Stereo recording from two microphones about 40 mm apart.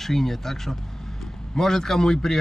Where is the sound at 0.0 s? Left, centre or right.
Centre.